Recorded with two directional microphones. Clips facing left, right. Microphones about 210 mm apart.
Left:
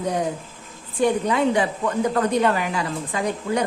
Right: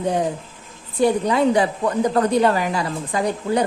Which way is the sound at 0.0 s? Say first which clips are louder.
Right 3 dB; 30° right (ahead or behind).